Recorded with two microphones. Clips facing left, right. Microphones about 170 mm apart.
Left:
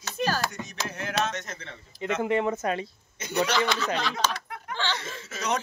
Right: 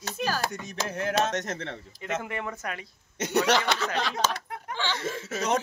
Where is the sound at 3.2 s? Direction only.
75° right (ahead or behind).